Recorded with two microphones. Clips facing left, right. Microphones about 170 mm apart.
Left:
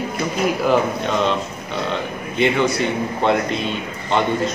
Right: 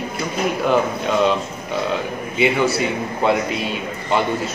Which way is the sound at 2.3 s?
5° right (ahead or behind).